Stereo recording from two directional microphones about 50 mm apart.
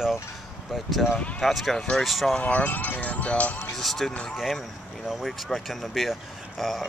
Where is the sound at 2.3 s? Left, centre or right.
Left.